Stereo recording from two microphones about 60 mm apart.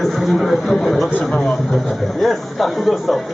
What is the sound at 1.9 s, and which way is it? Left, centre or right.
Speech, centre.